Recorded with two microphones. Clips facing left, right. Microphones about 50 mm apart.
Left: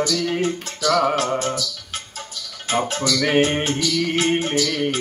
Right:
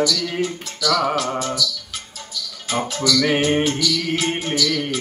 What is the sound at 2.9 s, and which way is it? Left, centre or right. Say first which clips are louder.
Speech: right 1 dB; left.